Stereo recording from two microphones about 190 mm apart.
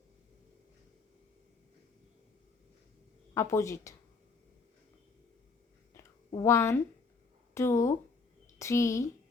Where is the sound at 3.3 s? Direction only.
15° left (ahead or behind).